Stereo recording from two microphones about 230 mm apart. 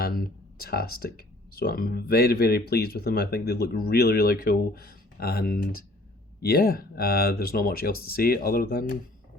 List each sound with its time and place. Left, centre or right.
0.0 s speech: left